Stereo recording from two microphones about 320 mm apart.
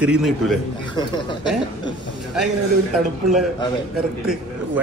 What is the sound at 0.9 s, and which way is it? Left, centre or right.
Speech, centre.